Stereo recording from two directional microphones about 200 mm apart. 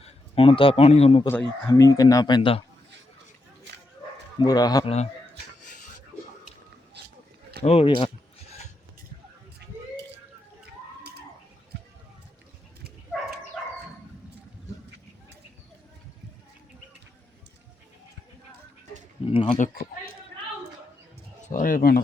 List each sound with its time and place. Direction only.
0.0 s a man's voice: 30° left (ahead or behind)
1.6 s speech: 15° left (ahead or behind)
4.4 s speech: 20° left (ahead or behind)
5.6 s a sound: 40° left (ahead or behind)
7.6 s speech: 30° left (ahead or behind)
19.2 s a sound: 25° left (ahead or behind)
21.4 s bird: 40° left (ahead or behind)